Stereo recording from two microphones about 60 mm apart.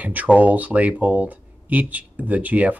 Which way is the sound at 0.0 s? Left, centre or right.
Right.